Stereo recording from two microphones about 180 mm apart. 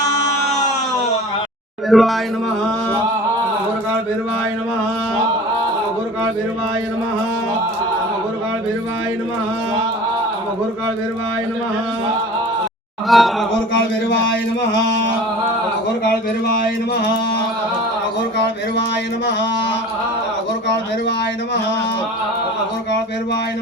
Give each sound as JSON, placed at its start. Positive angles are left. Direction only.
{"t": 1.9, "sound": "a sound", "side_deg": 0}
{"t": 13.1, "sound": "speech", "side_deg": 0}
{"t": 13.7, "sound": "speech", "side_deg": 85}